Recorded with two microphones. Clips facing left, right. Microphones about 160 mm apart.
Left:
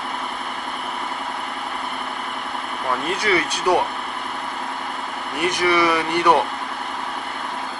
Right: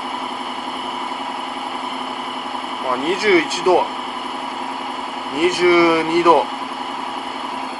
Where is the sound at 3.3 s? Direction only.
20° right (ahead or behind).